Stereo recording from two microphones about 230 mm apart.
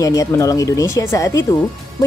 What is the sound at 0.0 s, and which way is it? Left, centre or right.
Speech, centre.